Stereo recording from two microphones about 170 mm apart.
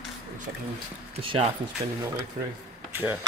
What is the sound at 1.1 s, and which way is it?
Speech, 35° right (ahead or behind).